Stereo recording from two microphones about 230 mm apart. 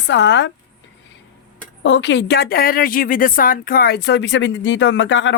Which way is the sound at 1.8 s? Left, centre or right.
Left.